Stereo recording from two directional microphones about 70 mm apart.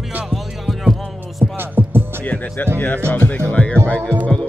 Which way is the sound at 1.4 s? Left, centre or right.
Right.